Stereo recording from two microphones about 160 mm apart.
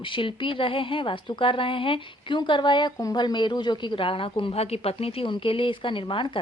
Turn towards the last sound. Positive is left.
turn(degrees=30)  # may be behind; listen again after turning